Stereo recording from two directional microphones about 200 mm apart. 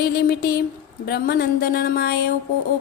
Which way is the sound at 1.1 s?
50° left (ahead or behind).